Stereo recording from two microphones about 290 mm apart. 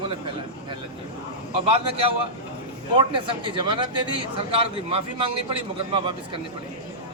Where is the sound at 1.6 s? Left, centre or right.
Centre.